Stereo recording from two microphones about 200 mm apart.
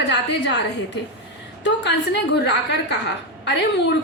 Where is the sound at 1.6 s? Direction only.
60° left (ahead or behind).